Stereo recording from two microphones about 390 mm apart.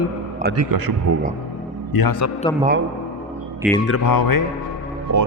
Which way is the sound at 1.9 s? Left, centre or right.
Left.